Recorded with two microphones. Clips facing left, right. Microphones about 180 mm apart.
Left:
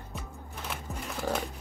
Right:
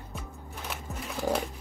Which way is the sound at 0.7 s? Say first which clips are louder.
Right 1 dB; 5° right (ahead or behind).